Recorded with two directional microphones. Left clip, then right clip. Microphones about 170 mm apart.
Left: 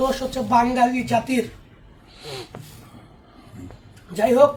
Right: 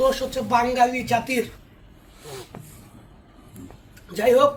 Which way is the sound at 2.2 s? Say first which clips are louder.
Left 4 dB; 25° left (ahead or behind).